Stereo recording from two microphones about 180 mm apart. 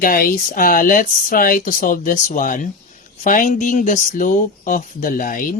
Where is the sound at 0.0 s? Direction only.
50° left (ahead or behind).